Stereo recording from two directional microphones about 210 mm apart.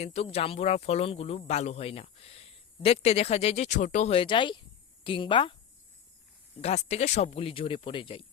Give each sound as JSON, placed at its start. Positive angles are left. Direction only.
{"t": 0.0, "sound": "speech", "side_deg": 30}
{"t": 6.6, "sound": "speech", "side_deg": 30}